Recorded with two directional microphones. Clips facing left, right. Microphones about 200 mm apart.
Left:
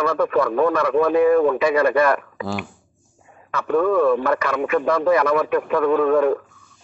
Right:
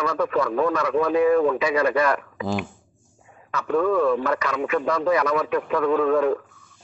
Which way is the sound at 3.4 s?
55° left (ahead or behind).